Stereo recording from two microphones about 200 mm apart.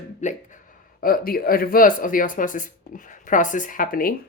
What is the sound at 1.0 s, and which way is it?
Speech, 45° left (ahead or behind).